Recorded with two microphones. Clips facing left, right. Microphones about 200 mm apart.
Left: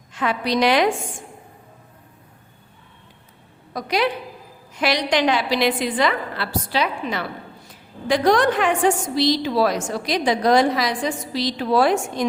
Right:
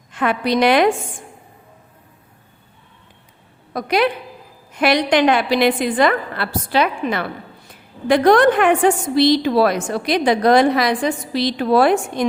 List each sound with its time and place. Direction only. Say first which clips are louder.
0.1 s a woman's voice: right 4 dB; 55° right (ahead or behind)
3.7 s a woman's voice: right 4 dB; 55° right (ahead or behind)